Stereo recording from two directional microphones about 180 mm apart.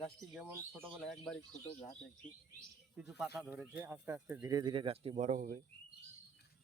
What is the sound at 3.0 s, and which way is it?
Speech, centre (ahead or behind).